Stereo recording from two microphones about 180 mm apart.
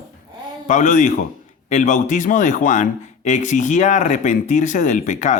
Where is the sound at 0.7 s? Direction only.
45° left (ahead or behind).